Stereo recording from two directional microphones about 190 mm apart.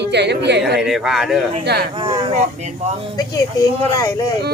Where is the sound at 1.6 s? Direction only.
60° right (ahead or behind).